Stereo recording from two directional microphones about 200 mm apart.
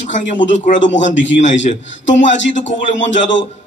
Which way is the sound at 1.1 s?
65° left (ahead or behind).